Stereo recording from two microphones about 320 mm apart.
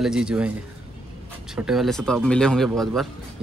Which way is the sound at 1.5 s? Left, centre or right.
Centre.